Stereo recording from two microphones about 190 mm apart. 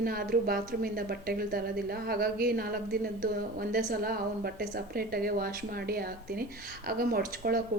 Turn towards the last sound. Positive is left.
turn(degrees=-50)  # may be behind; listen again after turning